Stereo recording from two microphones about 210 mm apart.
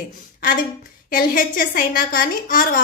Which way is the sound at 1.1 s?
40° left (ahead or behind).